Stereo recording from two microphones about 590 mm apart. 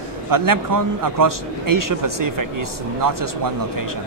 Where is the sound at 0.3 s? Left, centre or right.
Right.